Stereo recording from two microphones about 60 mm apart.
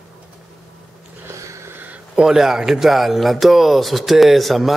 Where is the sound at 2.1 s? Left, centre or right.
Centre.